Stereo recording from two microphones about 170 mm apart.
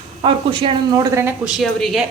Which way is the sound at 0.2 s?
30° right (ahead or behind).